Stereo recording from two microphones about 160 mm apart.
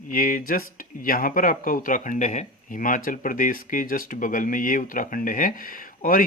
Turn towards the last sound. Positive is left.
turn(degrees=60)  # may be behind; listen again after turning